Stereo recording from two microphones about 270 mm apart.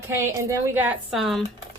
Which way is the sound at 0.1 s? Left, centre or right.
Centre.